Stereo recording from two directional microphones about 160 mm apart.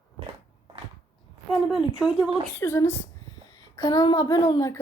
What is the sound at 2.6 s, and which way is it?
Speech, 15° left (ahead or behind).